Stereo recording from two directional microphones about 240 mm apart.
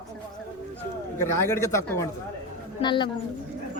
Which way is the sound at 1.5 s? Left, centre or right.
Centre.